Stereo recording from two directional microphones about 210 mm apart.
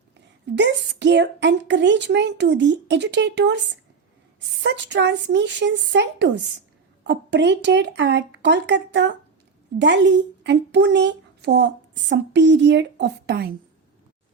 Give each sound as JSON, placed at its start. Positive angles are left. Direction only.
{"t": 0.5, "sound": "speech", "side_deg": -55}
{"t": 4.6, "sound": "speech", "side_deg": -55}